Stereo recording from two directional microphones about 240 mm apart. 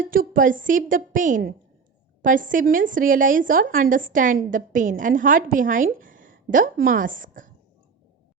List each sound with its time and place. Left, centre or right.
0.0 s a woman's voice: right